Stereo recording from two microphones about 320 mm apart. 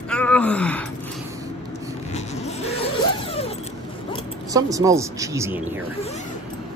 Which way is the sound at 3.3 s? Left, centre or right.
Centre.